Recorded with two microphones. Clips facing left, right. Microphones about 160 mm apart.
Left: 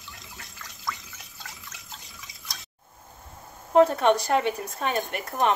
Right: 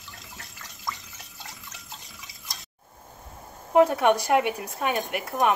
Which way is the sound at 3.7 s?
10° right (ahead or behind).